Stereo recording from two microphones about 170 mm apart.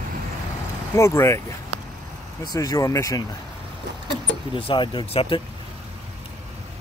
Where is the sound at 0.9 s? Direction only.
15° left (ahead or behind).